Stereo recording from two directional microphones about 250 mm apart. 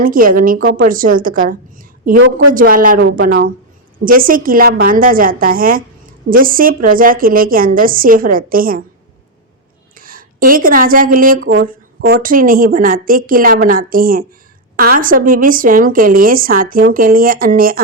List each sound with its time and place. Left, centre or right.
0.0 s a woman's voice: right
9.9 s a woman's voice: right